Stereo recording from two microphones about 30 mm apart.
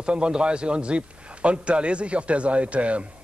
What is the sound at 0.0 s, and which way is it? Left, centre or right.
A man's voice, right.